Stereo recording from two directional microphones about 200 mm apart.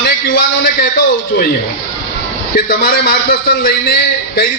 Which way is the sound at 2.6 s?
45° left (ahead or behind).